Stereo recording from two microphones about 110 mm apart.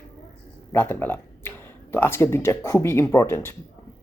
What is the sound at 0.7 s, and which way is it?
Speech, 20° left (ahead or behind).